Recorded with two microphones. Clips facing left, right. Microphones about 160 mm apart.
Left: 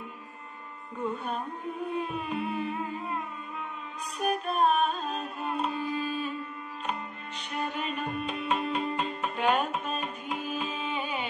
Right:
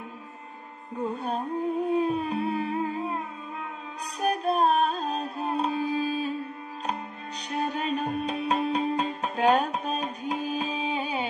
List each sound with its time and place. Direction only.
1.0 s carnatic music: 35° right (ahead or behind)
2.0 s music: 35° right (ahead or behind)
4.2 s music: 35° right (ahead or behind)
7.5 s music: 40° right (ahead or behind)